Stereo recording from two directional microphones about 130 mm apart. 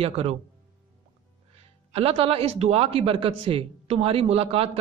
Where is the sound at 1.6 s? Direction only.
50° right (ahead or behind).